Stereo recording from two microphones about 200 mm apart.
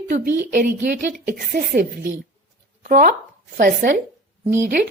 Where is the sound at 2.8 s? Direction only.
40° right (ahead or behind).